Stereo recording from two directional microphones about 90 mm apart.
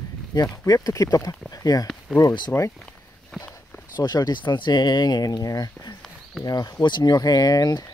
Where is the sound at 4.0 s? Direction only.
45° left (ahead or behind).